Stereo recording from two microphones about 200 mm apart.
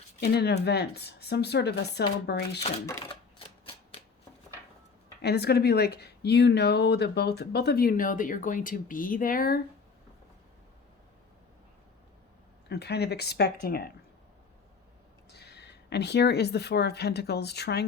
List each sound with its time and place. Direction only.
0.2 s speech: 55° left (ahead or behind)
3.0 s typewriter: 25° left (ahead or behind)
5.2 s speech: 55° left (ahead or behind)
12.6 s speech: 55° left (ahead or behind)
15.3 s speech: 55° left (ahead or behind)